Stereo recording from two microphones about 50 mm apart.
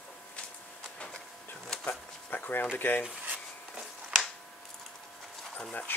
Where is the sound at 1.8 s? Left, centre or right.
Left.